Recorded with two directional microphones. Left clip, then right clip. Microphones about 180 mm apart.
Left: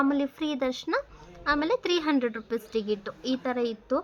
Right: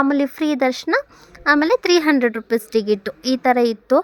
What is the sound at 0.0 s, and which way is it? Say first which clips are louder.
A woman's voice: right 9 dB; 40° right (ahead or behind).